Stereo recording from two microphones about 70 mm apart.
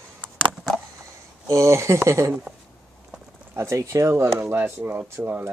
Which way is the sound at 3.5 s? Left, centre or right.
Right.